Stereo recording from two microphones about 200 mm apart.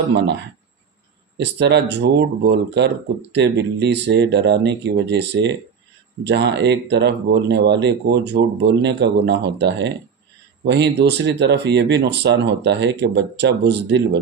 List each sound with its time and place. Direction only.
0.2 s speech: 60° right (ahead or behind)